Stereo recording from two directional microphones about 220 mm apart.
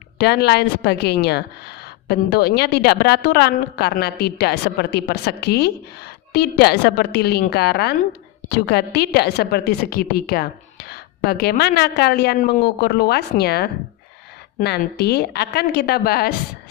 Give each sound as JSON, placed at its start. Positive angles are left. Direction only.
{"t": 0.2, "sound": "a woman's voice", "side_deg": 45}